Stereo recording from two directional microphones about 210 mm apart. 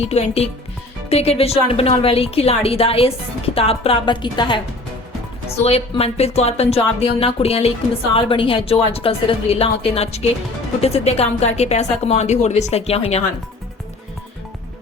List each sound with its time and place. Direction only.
0.1 s speech: 30° left (ahead or behind)